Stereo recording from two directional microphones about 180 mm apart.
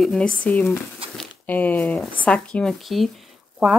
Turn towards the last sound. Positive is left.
turn(degrees=0)  # may be behind; listen again after turning